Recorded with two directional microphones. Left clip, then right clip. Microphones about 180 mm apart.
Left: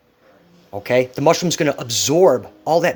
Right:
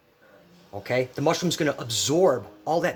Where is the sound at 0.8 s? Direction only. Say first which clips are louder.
Left 9 dB; 35° left (ahead or behind).